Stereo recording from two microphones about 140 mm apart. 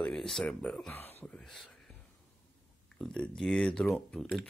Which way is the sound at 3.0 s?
5° left (ahead or behind).